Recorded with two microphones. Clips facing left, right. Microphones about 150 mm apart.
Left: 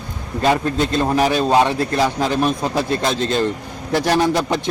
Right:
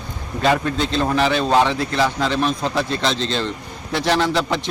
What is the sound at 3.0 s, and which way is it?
Speech, 50° left (ahead or behind).